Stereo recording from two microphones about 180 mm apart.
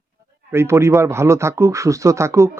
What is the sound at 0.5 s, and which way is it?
A man's voice, 15° right (ahead or behind).